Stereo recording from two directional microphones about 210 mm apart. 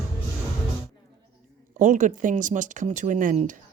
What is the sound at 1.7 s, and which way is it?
Speech, 35° right (ahead or behind).